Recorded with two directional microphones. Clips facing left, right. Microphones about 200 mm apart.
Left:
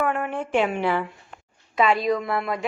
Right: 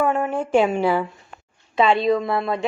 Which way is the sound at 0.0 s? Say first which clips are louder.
Right 4 dB; 30° right (ahead or behind).